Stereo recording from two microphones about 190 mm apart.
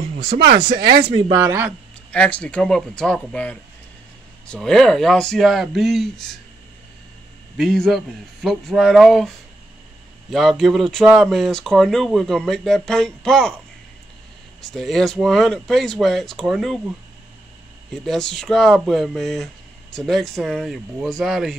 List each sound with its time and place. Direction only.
0.4 s speech: 55° right (ahead or behind)
1.1 s speech: 15° right (ahead or behind)
2.0 s speech: 5° left (ahead or behind)
7.5 s speech: centre (ahead or behind)
10.3 s speech: centre (ahead or behind)
14.6 s speech: centre (ahead or behind)
18.0 s speech: centre (ahead or behind)